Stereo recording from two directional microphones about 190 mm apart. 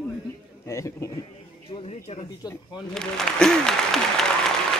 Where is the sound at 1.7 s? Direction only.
30° left (ahead or behind).